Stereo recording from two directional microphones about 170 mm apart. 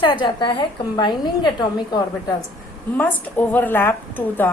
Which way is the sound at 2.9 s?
10° left (ahead or behind).